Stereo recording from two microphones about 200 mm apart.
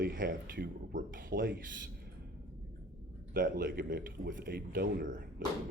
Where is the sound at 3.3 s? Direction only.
45° right (ahead or behind).